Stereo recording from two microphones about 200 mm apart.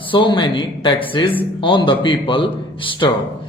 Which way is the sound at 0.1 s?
25° left (ahead or behind).